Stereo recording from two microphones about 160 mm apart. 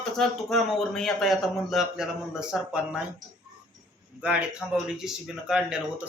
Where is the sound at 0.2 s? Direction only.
Centre (ahead or behind).